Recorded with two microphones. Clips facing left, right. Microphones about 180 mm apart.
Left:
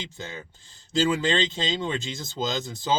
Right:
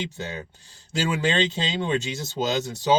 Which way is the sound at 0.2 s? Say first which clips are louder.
Right 4 dB; 15° right (ahead or behind).